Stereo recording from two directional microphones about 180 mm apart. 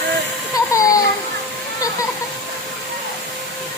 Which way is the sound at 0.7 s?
20° left (ahead or behind).